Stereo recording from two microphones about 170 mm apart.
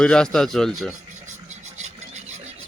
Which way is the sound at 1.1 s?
45° right (ahead or behind).